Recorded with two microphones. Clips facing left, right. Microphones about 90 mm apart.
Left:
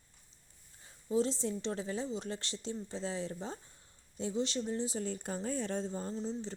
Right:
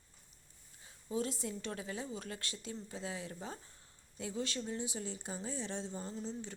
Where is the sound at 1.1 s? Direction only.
30° left (ahead or behind).